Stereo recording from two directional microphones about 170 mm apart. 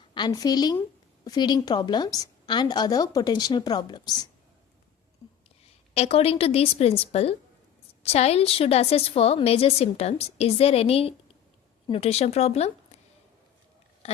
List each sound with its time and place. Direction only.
0.1 s a woman's voice: 25° left (ahead or behind)
5.9 s a woman's voice: 35° left (ahead or behind)
14.0 s a sound: 40° left (ahead or behind)